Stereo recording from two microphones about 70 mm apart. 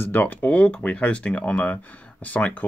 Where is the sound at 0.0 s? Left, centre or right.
Left.